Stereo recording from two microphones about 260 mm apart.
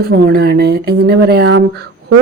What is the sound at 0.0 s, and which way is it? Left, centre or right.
Speech, right.